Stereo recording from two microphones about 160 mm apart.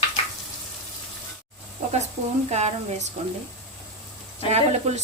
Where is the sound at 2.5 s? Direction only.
45° right (ahead or behind).